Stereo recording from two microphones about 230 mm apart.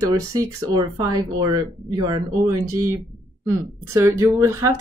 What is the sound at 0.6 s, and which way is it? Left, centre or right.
Speech, centre.